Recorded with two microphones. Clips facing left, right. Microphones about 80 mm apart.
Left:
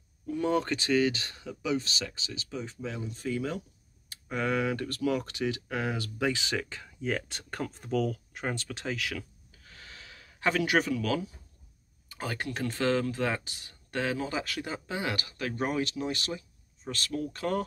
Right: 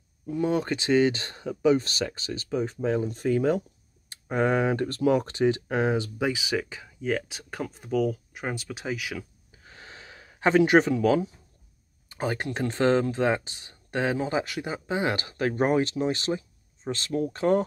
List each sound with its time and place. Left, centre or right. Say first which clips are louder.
0.3 s speech: right 2 dB; centre; by 3.6 s right
4.1 s speech: right 6 dB; right; by 9.2 s centre
9.5 s gasp: right 4 dB; right
12.1 s speech: right 6 dB; right